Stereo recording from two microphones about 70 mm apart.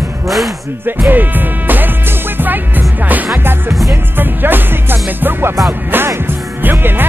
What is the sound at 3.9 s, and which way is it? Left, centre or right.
Music, right.